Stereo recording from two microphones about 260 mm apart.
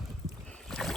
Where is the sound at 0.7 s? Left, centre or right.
Centre.